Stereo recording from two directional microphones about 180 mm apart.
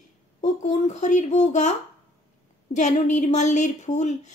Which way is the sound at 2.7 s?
40° left (ahead or behind).